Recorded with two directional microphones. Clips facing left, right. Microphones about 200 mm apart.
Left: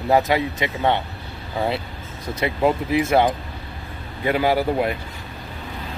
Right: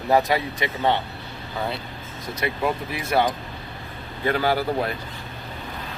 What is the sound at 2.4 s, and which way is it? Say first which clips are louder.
Speech: left 5 dB; 25° left (ahead or behind).